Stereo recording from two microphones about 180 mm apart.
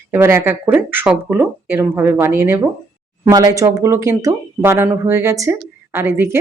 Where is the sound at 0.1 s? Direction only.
15° right (ahead or behind).